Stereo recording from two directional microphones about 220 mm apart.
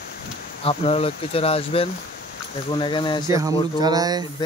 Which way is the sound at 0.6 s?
25° left (ahead or behind).